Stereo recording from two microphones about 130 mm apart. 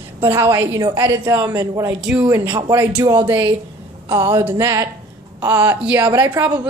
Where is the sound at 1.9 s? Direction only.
5° right (ahead or behind).